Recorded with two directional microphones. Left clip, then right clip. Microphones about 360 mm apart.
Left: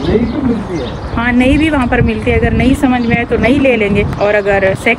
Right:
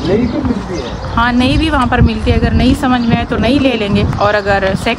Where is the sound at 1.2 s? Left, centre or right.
Centre.